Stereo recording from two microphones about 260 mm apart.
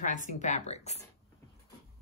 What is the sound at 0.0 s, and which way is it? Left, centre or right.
Speech, left.